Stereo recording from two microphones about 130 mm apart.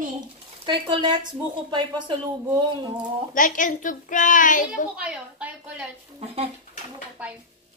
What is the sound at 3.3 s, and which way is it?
A child's voice, 90° left.